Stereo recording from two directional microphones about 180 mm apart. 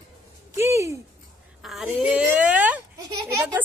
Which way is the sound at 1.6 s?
Centre (ahead or behind).